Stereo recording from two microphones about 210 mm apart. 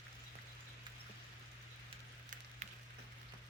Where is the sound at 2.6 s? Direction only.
35° right (ahead or behind).